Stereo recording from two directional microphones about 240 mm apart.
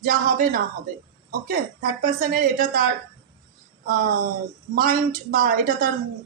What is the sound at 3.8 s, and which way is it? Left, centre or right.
Speech, right.